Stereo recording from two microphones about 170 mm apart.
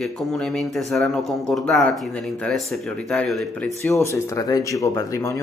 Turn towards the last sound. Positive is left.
turn(degrees=20)  # may be behind; listen again after turning